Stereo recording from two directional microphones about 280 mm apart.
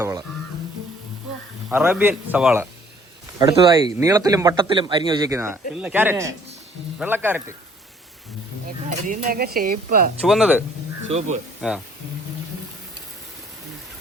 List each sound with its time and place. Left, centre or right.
0.0 s speech: centre
1.7 s speech: centre
8.9 s speech: right
10.2 s speech: centre
11.6 s speech: centre